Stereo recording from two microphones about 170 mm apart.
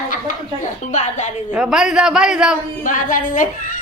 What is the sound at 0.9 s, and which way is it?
Speech, 45° left (ahead or behind).